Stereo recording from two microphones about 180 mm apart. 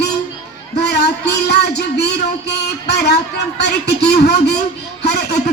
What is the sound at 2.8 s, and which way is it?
Speech, 65° left (ahead or behind).